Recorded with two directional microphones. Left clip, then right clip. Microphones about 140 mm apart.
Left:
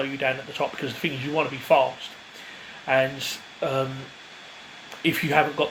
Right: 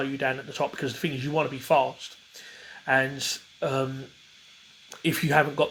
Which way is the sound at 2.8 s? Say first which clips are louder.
Left 2 dB; 75° right (ahead or behind).